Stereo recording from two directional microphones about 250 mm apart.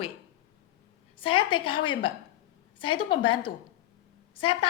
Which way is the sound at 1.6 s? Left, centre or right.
Centre.